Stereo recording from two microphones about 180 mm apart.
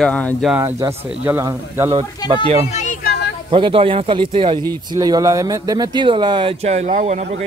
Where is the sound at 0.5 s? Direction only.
10° right (ahead or behind).